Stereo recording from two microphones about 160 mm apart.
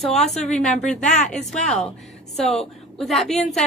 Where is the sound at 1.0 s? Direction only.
50° left (ahead or behind).